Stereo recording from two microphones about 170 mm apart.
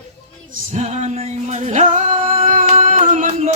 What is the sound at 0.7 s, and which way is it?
Music, 45° right (ahead or behind).